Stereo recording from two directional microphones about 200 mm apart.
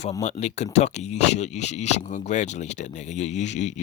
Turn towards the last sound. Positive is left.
turn(degrees=35)  # may be behind; listen again after turning